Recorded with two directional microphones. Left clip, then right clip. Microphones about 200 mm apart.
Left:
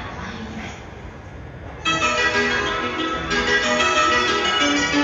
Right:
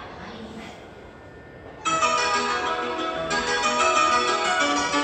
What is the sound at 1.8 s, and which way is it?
Music, 35° right (ahead or behind).